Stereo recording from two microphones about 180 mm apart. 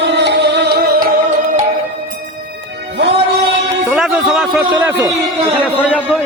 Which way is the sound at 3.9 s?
Centre (ahead or behind).